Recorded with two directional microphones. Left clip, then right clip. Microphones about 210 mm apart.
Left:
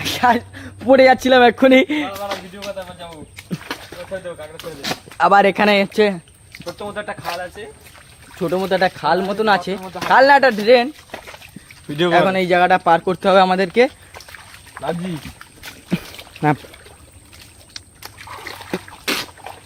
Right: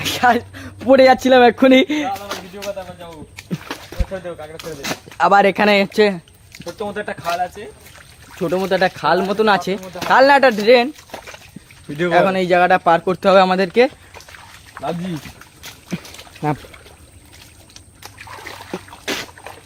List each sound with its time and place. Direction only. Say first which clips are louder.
0.0 s speech: right 1 dB; 5° right (ahead or behind)
2.6 s a sound: right 1 dB; 45° left (ahead or behind)
4.1 s speech: even; centre (ahead or behind)
6.9 s speech: right 4 dB; 45° right (ahead or behind)
8.4 s speech: even; centre (ahead or behind)
11.9 s speech: left 2 dB; 40° left (ahead or behind)
12.1 s speech: right 1 dB; 5° left (ahead or behind)
18.0 s splash: even; 10° left (ahead or behind)
18.7 s a sound: left 3 dB; 35° left (ahead or behind)